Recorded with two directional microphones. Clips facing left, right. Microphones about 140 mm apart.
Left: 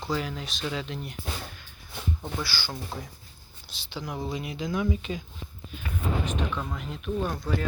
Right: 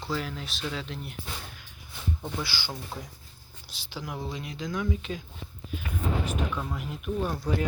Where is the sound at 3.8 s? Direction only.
5° right (ahead or behind).